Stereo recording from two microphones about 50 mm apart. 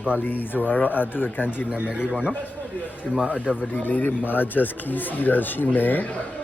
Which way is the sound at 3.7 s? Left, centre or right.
Left.